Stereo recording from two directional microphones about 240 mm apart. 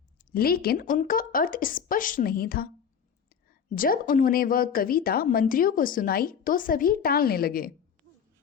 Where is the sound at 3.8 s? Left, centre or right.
Left.